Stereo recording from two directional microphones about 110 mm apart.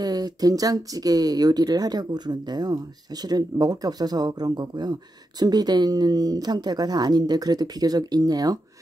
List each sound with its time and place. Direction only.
0.0 s speech: 35° right (ahead or behind)